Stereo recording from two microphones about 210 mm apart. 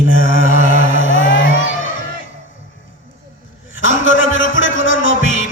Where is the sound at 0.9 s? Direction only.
65° left (ahead or behind).